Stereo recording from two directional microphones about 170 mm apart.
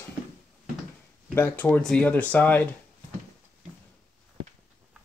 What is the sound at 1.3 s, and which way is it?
Speech, 10° left (ahead or behind).